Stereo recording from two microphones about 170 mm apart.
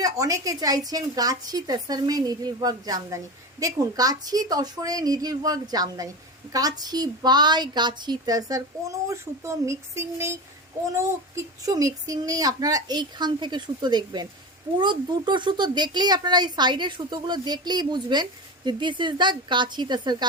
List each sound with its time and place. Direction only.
0.0 s a woman's voice: 20° right (ahead or behind)